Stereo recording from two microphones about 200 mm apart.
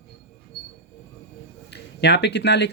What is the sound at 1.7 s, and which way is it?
Speech, 55° left (ahead or behind).